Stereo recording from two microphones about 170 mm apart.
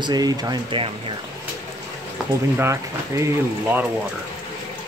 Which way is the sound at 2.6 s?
15° right (ahead or behind).